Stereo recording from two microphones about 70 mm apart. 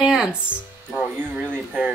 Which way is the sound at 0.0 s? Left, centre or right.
Centre.